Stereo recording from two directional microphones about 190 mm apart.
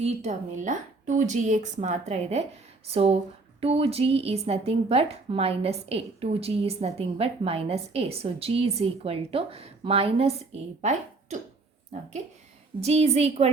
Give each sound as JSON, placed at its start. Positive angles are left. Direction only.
{"t": 0.0, "sound": "speech", "side_deg": -40}
{"t": 12.8, "sound": "speech", "side_deg": -35}